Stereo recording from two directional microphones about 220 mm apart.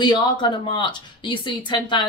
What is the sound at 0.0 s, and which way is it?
Speech, 20° left (ahead or behind).